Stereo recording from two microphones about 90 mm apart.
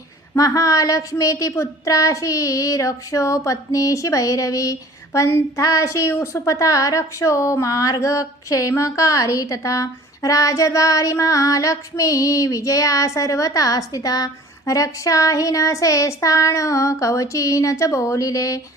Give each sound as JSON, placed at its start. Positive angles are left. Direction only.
{"t": 0.3, "sound": "a woman's voice", "side_deg": 40}